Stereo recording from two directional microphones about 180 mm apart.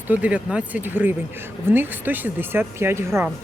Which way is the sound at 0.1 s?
10° right (ahead or behind).